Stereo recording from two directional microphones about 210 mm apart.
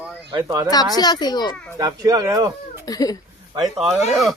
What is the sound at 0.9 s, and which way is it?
Speech, 20° left (ahead or behind).